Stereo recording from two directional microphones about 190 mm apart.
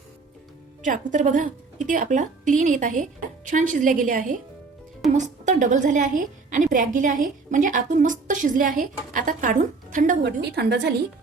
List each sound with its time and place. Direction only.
0.8 s a woman's voice: 40° right (ahead or behind)
10.4 s a woman's voice: 60° right (ahead or behind)